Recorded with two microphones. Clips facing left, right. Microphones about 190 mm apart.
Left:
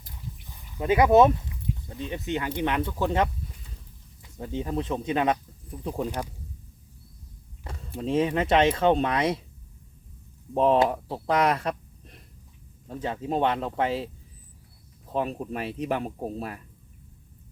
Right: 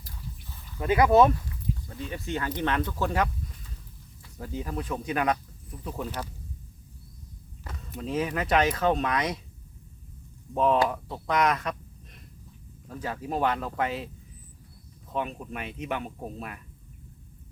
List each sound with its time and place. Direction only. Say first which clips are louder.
0.0 s speech: left 1 dB; 20° left (ahead or behind)
4.4 s speech: left 4 dB; 25° left (ahead or behind)
7.6 s speech: left 4 dB; 30° left (ahead or behind)
10.5 s speech: left 3 dB; 30° left (ahead or behind)
12.9 s speech: left 3 dB; 25° left (ahead or behind)